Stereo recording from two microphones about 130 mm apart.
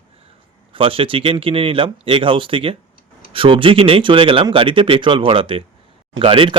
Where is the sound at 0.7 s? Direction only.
45° right (ahead or behind).